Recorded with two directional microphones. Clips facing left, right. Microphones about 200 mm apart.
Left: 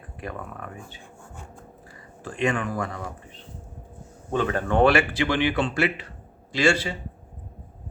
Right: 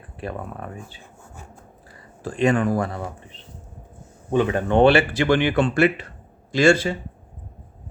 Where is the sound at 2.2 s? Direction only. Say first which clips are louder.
Right 6 dB; 35° right (ahead or behind).